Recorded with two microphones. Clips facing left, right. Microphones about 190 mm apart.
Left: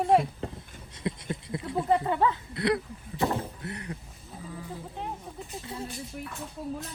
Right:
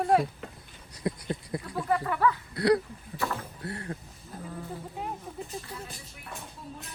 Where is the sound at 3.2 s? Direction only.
20° left (ahead or behind).